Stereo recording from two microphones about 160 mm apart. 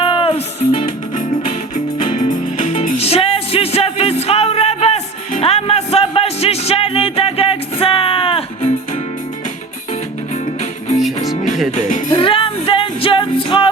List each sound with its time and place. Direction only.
0.0 s music: 35° left (ahead or behind)
0.9 s music: 55° left (ahead or behind); by 8.4 s 35° left (ahead or behind)
11.7 s music: 50° left (ahead or behind)
12.1 s music: 35° left (ahead or behind)